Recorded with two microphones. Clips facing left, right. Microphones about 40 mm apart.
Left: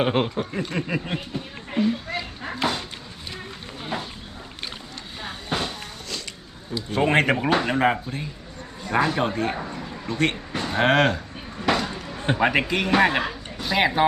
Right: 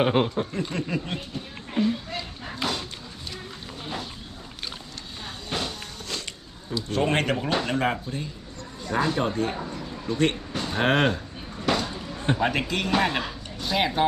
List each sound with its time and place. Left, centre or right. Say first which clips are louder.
0.0 s speech: even; centre
2.0 s dog: left 4 dB; centre
5.2 s vehicle: left 3 dB; centre
6.1 s a sound: right 1 dB; right
6.7 s speech: left 4 dB; centre
9.5 s bow-wow: left 2 dB; left
10.1 s speech: even; centre
10.5 s a sound: left 3 dB; centre
10.8 s speech: left 3 dB; centre
11.6 s a sound: left 2 dB; centre
12.9 s speech: left 5 dB; centre